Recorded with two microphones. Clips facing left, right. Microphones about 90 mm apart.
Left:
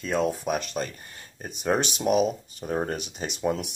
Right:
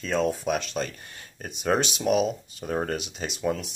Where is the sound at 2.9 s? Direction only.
45° left (ahead or behind).